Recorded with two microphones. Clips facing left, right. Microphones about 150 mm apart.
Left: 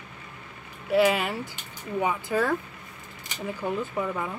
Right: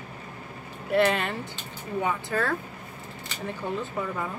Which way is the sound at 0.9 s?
5° left (ahead or behind).